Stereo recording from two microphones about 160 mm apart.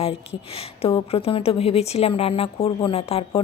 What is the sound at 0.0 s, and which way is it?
A woman's voice, 35° left (ahead or behind).